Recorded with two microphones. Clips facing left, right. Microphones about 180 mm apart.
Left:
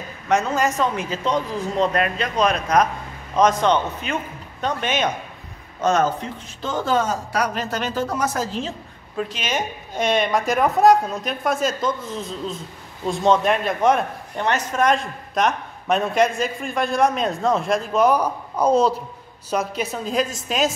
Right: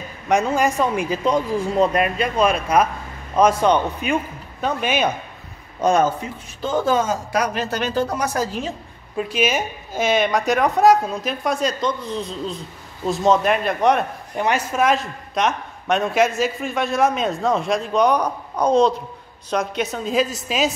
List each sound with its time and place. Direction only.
0.3 s speech: 15° right (ahead or behind)
8.6 s a woman's voice: 10° right (ahead or behind)